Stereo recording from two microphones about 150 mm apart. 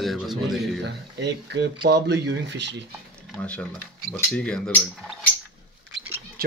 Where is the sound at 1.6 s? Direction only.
90° right.